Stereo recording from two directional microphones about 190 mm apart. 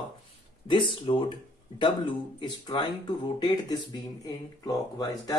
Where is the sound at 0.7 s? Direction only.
25° left (ahead or behind).